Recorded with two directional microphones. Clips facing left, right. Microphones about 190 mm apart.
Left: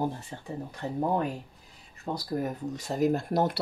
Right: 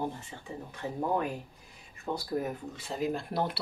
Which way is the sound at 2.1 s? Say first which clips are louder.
Left 1 dB; 40° left (ahead or behind).